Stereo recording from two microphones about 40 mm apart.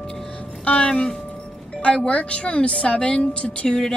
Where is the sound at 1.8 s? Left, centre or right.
Left.